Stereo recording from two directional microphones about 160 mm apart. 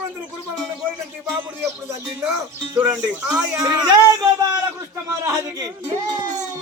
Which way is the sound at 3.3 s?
5° right (ahead or behind).